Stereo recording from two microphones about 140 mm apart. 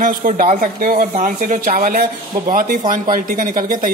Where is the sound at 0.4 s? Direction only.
75° right (ahead or behind).